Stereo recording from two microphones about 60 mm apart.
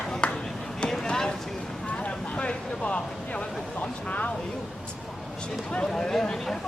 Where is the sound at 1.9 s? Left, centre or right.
Left.